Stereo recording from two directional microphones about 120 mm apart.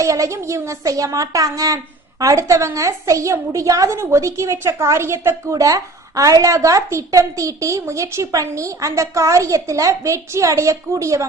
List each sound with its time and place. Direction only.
0.0 s a woman's voice: 25° right (ahead or behind)